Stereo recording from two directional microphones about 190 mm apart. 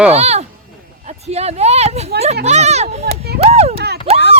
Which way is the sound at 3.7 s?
60° right (ahead or behind).